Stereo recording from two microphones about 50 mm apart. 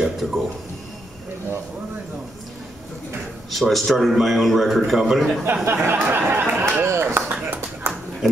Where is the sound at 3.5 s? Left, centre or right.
Centre.